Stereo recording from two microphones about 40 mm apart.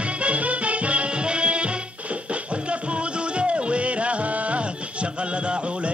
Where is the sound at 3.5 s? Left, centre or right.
Right.